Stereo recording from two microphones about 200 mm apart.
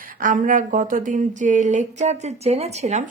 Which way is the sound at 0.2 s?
40° right (ahead or behind).